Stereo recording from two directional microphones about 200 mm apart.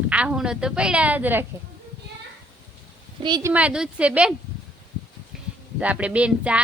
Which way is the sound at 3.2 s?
20° right (ahead or behind).